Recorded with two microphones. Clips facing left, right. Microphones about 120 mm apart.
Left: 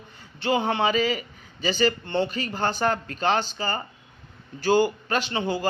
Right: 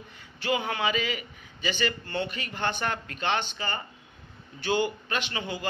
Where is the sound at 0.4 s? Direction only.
30° left (ahead or behind).